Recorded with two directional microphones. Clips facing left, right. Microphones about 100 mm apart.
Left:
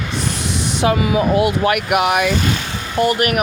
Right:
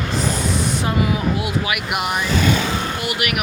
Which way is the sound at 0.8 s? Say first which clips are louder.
Left 8 dB; 65° left (ahead or behind).